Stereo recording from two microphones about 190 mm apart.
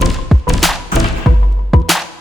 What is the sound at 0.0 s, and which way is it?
Music, centre (ahead or behind).